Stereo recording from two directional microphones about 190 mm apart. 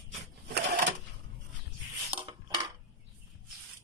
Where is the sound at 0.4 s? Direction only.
60° right (ahead or behind).